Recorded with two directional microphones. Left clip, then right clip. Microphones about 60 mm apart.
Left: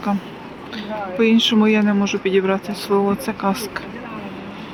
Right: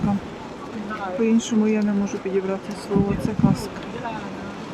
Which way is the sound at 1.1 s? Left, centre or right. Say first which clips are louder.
Left 6 dB; left.